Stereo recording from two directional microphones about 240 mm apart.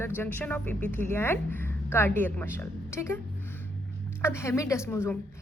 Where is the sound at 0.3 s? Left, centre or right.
Centre.